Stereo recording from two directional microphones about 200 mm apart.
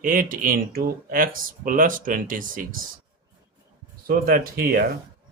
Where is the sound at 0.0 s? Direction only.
40° right (ahead or behind).